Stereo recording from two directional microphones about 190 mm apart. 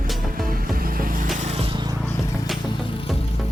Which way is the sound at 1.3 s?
35° right (ahead or behind).